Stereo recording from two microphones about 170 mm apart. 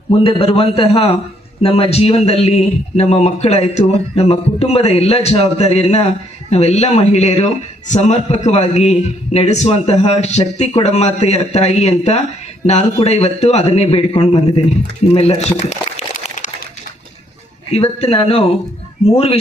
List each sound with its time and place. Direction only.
0.1 s a man's voice: 35° left (ahead or behind)
17.7 s a man's voice: 35° left (ahead or behind)